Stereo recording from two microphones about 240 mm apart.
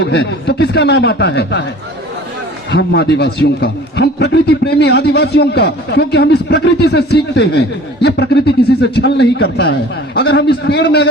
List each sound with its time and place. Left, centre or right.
0.0 s a man's voice: left
2.7 s a man's voice: left